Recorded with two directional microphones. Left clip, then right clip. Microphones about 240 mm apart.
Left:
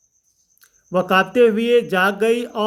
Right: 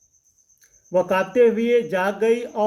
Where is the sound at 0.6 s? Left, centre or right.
Left.